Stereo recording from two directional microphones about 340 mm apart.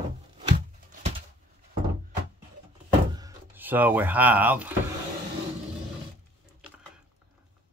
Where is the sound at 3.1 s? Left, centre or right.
Centre.